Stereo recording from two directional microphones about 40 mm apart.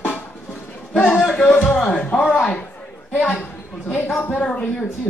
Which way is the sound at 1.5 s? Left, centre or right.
Left.